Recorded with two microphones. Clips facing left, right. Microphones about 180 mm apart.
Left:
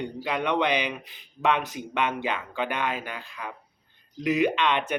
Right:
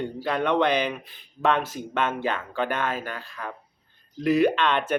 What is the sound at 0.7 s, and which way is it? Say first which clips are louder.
Speech: right 3 dB; 45° right (ahead or behind).